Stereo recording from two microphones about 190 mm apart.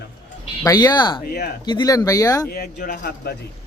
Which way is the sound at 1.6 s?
20° left (ahead or behind).